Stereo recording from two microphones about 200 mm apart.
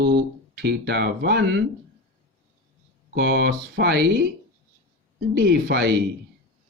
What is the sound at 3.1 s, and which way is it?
Speech, 55° right (ahead or behind).